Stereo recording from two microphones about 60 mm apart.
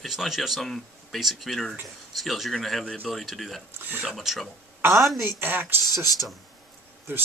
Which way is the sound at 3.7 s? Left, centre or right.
Right.